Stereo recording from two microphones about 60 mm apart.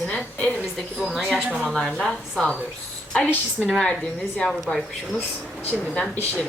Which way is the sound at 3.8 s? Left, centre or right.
Centre.